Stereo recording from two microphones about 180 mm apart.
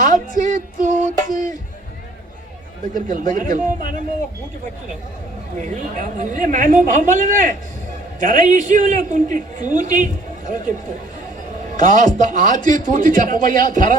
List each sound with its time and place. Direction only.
0.0 s female singing: 50° right (ahead or behind)
2.9 s a man's voice: 50° right (ahead or behind)
5.5 s a man's voice: 45° right (ahead or behind)
11.8 s a man's voice: 45° right (ahead or behind)